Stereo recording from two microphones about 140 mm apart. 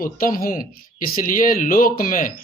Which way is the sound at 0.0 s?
90° left.